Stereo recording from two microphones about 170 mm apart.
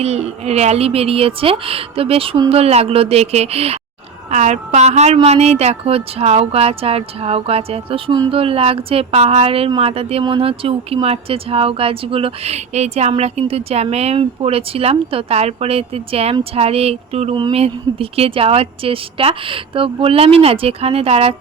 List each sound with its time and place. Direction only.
0.0 s a woman's voice: 40° right (ahead or behind)